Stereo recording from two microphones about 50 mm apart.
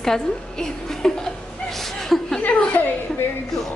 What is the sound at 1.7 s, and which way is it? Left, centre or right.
Chuckle, centre.